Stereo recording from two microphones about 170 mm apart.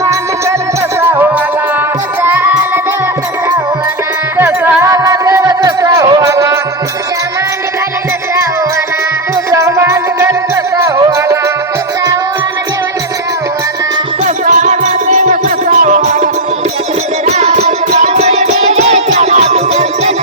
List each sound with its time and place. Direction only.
0.0 s music: 20° right (ahead or behind)
4.4 s music: 15° right (ahead or behind)
9.5 s music: 20° right (ahead or behind)
14.3 s music: 45° right (ahead or behind)